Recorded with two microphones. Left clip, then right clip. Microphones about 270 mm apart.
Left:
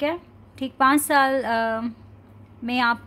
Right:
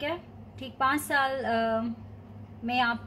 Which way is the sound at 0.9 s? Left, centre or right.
Left.